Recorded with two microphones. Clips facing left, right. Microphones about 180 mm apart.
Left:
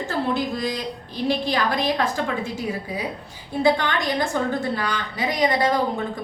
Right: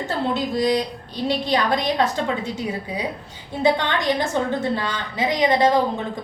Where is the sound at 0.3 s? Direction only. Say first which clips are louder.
Right 5 dB; 20° right (ahead or behind).